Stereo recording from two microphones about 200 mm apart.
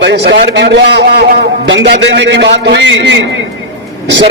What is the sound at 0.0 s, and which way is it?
A man's voice, 60° right (ahead or behind).